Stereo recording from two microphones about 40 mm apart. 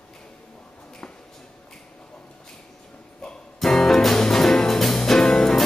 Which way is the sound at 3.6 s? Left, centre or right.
Centre.